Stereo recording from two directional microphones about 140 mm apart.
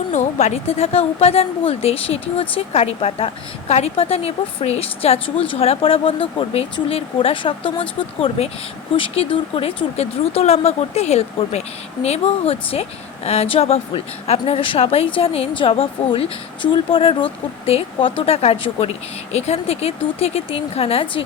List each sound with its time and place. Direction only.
0.1 s speech: 55° left (ahead or behind); by 21.2 s 40° left (ahead or behind)